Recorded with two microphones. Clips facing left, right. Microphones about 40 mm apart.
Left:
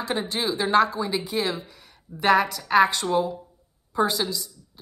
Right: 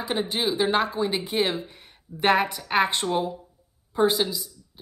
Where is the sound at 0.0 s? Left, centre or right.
Centre.